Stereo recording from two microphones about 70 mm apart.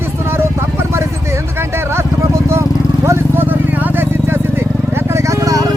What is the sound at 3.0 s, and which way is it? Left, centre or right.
Vehicle, right.